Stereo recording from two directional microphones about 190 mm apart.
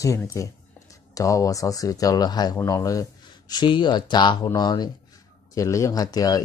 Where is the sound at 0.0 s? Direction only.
15° left (ahead or behind).